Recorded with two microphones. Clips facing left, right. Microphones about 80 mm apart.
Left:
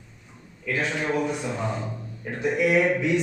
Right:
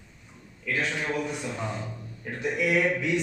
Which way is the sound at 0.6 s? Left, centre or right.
Centre.